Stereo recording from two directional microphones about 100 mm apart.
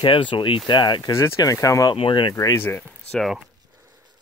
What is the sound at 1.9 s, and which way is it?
Speech, 60° left (ahead or behind).